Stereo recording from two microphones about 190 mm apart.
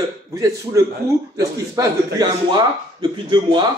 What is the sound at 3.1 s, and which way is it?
Speech, 25° right (ahead or behind).